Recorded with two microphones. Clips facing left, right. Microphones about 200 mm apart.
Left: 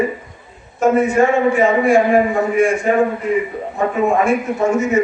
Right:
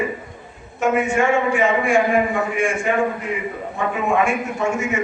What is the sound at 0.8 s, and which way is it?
A man's voice, 35° left (ahead or behind).